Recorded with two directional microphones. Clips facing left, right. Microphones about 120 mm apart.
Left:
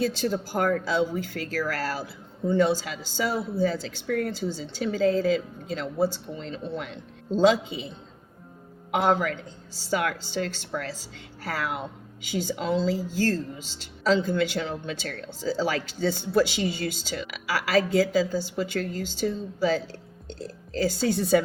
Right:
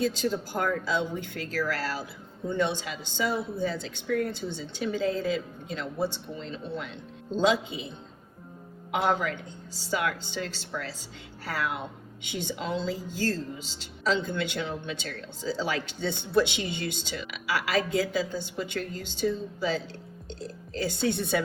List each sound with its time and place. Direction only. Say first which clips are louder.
0.2 s speech: left 3 dB; 45° left (ahead or behind)
4.3 s speech: left 4 dB; 40° left (ahead or behind)
8.9 s speech: left 3 dB; 40° left (ahead or behind)